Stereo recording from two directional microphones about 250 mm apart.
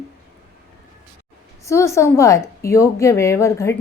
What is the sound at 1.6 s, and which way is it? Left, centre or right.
Speech, centre.